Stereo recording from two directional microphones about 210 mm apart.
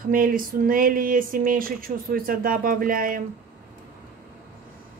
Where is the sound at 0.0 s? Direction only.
40° right (ahead or behind).